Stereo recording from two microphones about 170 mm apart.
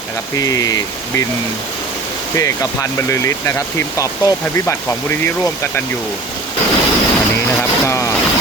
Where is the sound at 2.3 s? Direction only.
20° left (ahead or behind).